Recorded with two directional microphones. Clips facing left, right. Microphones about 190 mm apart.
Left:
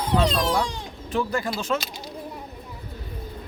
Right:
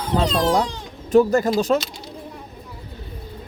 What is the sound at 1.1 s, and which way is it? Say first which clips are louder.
Speech: right 10 dB; 40° right (ahead or behind).